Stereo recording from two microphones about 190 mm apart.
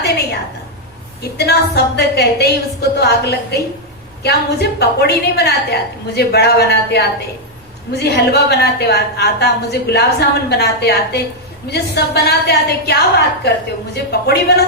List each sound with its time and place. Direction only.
1.4 s a woman's voice: 60° left (ahead or behind)